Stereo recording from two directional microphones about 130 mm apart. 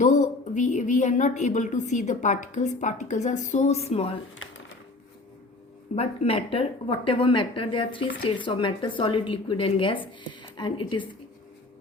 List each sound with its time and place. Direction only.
0.0 s a woman's voice: 75° left (ahead or behind); by 4.2 s 50° left (ahead or behind)
6.0 s speech: 50° left (ahead or behind)